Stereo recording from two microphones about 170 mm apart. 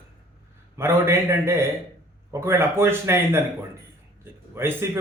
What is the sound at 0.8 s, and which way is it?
A man's voice, 15° right (ahead or behind).